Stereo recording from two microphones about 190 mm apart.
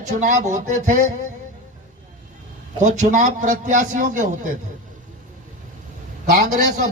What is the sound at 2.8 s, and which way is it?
Speech, 40° right (ahead or behind).